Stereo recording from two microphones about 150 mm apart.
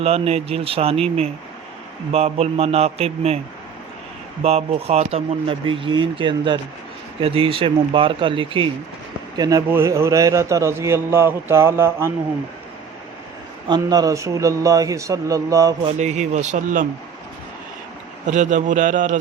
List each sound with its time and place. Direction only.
0.0 s speech: 45° right (ahead or behind)
2.1 s a man's voice: 45° right (ahead or behind)
4.4 s speech: 45° right (ahead or behind)
9.3 s a man's voice: 25° right (ahead or behind)
13.7 s speech: 25° right (ahead or behind)
16.0 s a man's voice: 50° right (ahead or behind)
18.3 s a man's voice: 55° right (ahead or behind)